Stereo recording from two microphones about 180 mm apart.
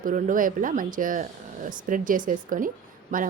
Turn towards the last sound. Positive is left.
turn(degrees=-50)  # may be behind; listen again after turning